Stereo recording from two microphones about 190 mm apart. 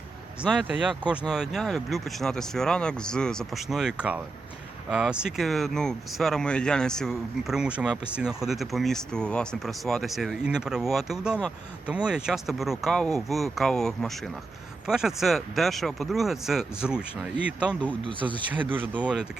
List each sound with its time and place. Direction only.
0.4 s speech: 5° right (ahead or behind)
18.0 s speech: 25° right (ahead or behind)
18.5 s speech: 10° right (ahead or behind)